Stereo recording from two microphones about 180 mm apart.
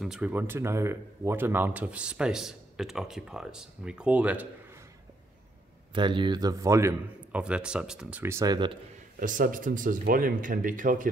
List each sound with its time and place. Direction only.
0.0 s speech: 5° right (ahead or behind)
5.9 s speech: 25° right (ahead or behind)
9.2 s speech: 50° right (ahead or behind)